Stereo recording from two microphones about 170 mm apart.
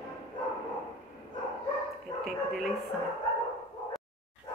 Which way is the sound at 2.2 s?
Centre (ahead or behind).